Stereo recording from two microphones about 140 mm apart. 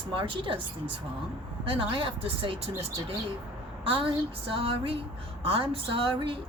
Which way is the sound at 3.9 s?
40° right (ahead or behind).